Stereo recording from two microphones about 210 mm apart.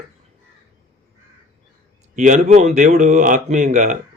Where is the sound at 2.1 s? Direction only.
35° right (ahead or behind).